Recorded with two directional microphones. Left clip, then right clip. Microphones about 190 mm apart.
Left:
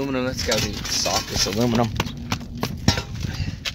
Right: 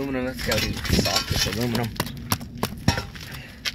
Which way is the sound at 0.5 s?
40° left (ahead or behind).